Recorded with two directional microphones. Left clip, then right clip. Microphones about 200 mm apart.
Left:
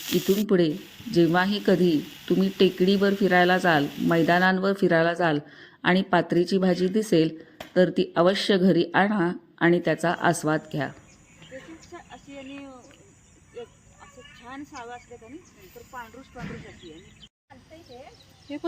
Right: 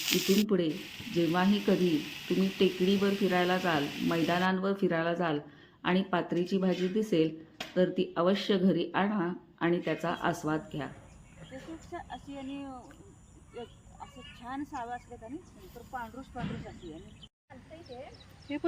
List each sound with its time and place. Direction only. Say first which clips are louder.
0.1 s speech: left 5 dB; 10° left (ahead or behind)
0.4 s speech: left 7 dB; 35° left (ahead or behind)
11.9 s a sound: right 1 dB; 60° right (ahead or behind)
14.4 s a sound: right 1 dB; 55° right (ahead or behind)
15.9 s speech: even; 55° right (ahead or behind)
18.5 s speech: left 1 dB; 75° left (ahead or behind)